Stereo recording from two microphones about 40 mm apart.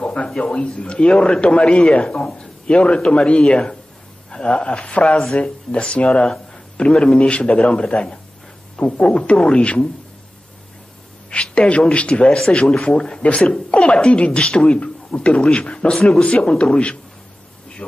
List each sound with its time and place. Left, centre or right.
0.0 s a sound: left
0.4 s a man's voice: left
11.2 s a man's voice: left